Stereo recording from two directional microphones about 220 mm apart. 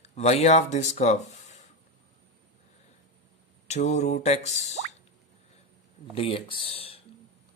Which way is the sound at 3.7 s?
30° left (ahead or behind).